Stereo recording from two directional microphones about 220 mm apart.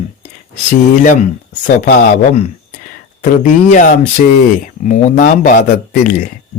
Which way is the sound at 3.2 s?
40° left (ahead or behind).